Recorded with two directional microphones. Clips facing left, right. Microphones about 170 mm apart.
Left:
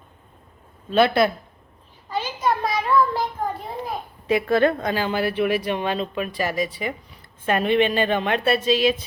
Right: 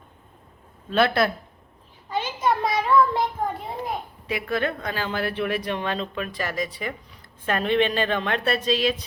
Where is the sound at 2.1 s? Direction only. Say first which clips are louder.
Even; 20° right (ahead or behind).